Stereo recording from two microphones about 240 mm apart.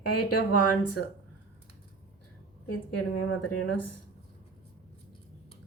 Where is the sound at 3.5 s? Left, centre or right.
Left.